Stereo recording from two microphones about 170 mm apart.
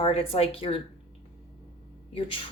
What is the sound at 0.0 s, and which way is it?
Speech, 35° left (ahead or behind).